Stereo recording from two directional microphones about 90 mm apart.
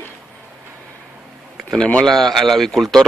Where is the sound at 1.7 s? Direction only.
5° left (ahead or behind).